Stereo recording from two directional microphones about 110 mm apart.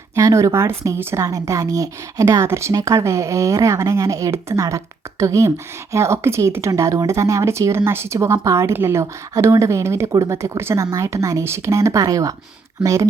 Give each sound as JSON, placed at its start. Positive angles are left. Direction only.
{"t": 0.2, "sound": "speech", "side_deg": -30}